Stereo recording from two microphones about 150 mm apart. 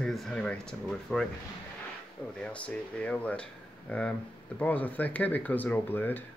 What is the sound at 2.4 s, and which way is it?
Speech, 10° left (ahead or behind).